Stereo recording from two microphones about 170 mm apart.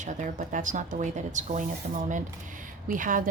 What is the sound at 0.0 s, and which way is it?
Speech, 50° right (ahead or behind).